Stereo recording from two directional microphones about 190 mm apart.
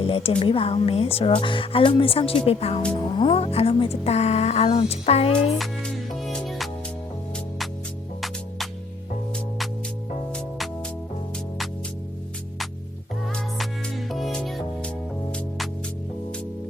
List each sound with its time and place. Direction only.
0.0 s speech: 30° left (ahead or behind)
5.5 s music: 5° left (ahead or behind)
13.3 s music: centre (ahead or behind)